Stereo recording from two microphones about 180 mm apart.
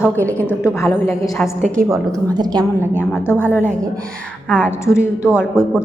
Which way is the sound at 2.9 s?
10° left (ahead or behind).